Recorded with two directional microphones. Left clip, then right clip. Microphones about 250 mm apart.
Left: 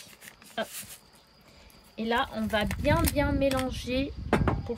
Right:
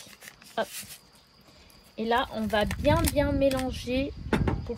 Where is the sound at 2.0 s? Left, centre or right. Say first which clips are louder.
Right 2 dB; centre.